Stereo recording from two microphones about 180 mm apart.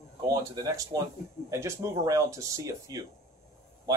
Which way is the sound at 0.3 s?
20° right (ahead or behind).